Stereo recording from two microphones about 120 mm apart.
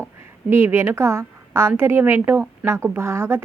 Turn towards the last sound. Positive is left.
turn(degrees=-20)  # may be behind; listen again after turning